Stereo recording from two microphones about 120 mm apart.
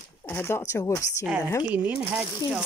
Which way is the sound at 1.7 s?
15° right (ahead or behind).